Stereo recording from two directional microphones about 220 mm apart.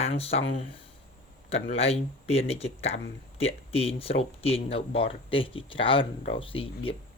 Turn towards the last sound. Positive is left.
turn(degrees=25)  # may be behind; listen again after turning